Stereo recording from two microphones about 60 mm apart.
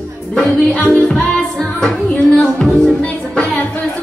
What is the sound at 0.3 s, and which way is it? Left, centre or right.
Music, centre.